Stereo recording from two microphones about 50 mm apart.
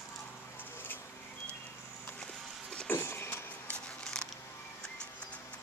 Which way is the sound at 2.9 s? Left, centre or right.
Left.